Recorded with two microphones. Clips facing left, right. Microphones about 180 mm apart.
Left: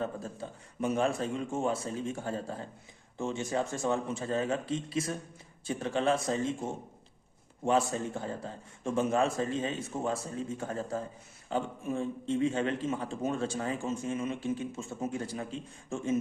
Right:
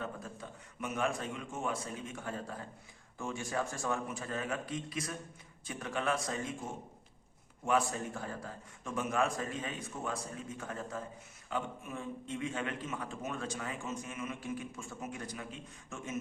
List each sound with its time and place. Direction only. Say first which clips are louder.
0.0 s a man's voice: left 6 dB; 30° left (ahead or behind)
7.6 s a man's voice: left 4 dB; 25° left (ahead or behind)